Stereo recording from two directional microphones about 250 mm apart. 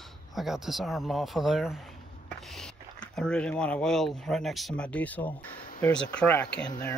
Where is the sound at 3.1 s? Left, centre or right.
Centre.